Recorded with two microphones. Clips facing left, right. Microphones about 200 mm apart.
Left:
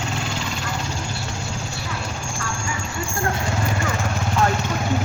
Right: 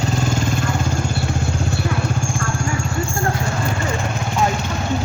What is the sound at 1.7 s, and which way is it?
Vehicle, 55° right (ahead or behind).